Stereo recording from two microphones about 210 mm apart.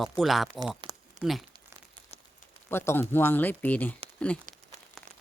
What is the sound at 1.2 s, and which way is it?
Speech, centre (ahead or behind).